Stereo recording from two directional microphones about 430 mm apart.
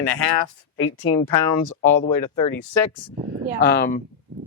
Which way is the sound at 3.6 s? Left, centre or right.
Left.